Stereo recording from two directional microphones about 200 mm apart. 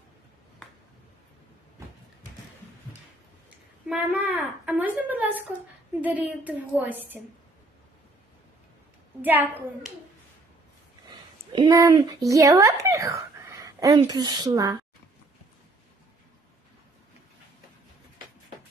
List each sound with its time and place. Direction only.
3.8 s a woman's voice: 5° right (ahead or behind)
9.2 s a woman's voice: 10° right (ahead or behind)
11.5 s speech: 20° right (ahead or behind)